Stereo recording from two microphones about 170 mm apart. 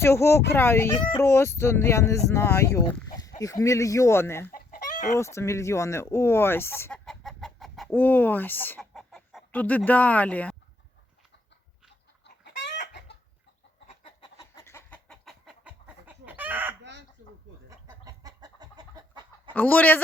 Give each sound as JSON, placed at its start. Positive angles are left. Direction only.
{"t": 0.0, "sound": "speech", "side_deg": 15}
{"t": 4.5, "sound": "chicken", "side_deg": 55}
{"t": 5.1, "sound": "speech", "side_deg": 15}
{"t": 7.0, "sound": "chicken", "side_deg": 0}
{"t": 7.9, "sound": "speech", "side_deg": 10}
{"t": 8.8, "sound": "chicken", "side_deg": 0}
{"t": 9.5, "sound": "speech", "side_deg": 10}
{"t": 12.2, "sound": "chicken", "side_deg": 85}
{"t": 13.8, "sound": "chicken", "side_deg": 30}
{"t": 16.8, "sound": "chicken", "side_deg": -90}
{"t": 17.7, "sound": "chicken", "side_deg": -20}
{"t": 19.5, "sound": "speech", "side_deg": 10}